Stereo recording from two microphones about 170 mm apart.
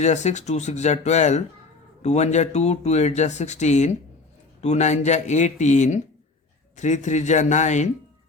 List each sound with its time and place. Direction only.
0.0 s speech: 45° left (ahead or behind)